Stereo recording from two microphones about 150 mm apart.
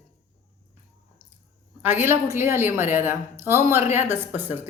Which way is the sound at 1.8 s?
15° right (ahead or behind).